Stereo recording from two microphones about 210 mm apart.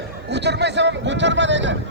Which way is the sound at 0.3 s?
55° right (ahead or behind).